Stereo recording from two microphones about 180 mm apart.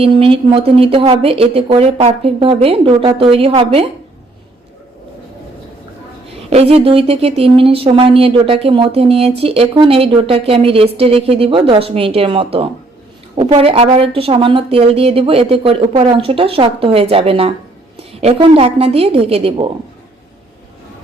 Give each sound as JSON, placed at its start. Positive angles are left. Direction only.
{"t": 0.0, "sound": "a woman's voice", "side_deg": -30}
{"t": 6.5, "sound": "a woman's voice", "side_deg": -35}